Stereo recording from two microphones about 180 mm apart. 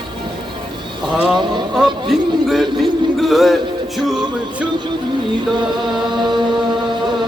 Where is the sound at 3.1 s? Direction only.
Centre (ahead or behind).